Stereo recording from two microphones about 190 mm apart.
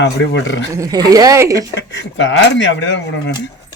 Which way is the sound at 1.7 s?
70° left (ahead or behind).